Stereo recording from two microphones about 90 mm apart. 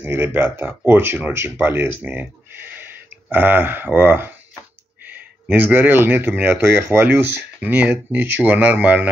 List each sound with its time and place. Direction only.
0.0 s speech: 25° right (ahead or behind)